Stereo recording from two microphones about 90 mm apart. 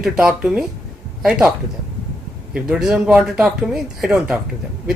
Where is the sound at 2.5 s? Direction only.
10° right (ahead or behind).